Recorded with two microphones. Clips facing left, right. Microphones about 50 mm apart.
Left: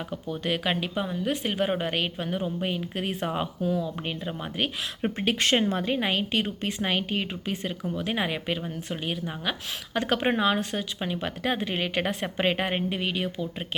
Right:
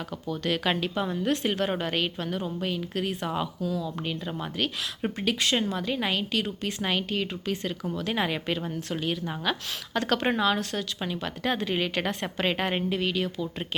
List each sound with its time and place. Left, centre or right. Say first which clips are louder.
0.1 s a woman's voice: right 1 dB; centre
6.8 s a woman's voice: even; centre